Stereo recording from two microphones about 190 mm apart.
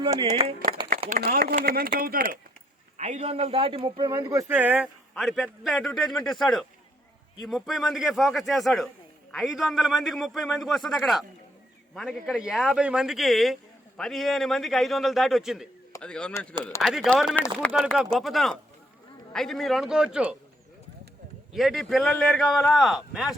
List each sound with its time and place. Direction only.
0.0 s speech: 25° right (ahead or behind)
1.1 s speech: 50° right (ahead or behind)
3.0 s a man's voice: 35° right (ahead or behind); by 20.1 s centre (ahead or behind)
21.5 s a man's voice: centre (ahead or behind)